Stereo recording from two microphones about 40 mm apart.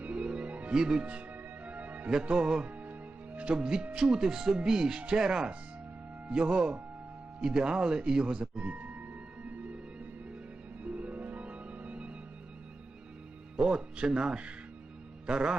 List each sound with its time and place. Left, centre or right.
0.0 s music: right
0.7 s speech: centre
1.0 s music: right
1.8 s music: right
2.3 s speech: right
4.9 s speech: right
5.2 s speech: centre
6.2 s speech: right
10.8 s music: right
13.6 s music: centre
13.9 s speech: right